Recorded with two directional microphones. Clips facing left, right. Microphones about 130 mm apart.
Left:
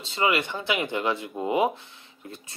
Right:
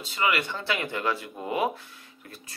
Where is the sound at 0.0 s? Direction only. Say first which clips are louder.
Left 2 dB; 25° left (ahead or behind).